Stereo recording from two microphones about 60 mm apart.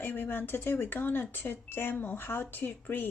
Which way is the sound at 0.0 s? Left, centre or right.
Left.